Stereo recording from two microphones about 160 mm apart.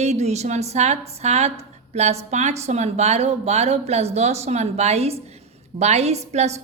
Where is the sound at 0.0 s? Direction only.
45° right (ahead or behind).